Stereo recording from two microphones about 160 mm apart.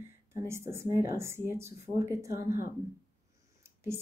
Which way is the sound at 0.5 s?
15° right (ahead or behind).